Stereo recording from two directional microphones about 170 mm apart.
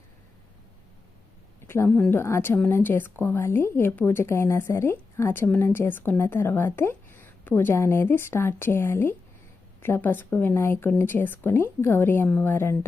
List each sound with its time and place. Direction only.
1.6 s a woman's voice: 15° left (ahead or behind)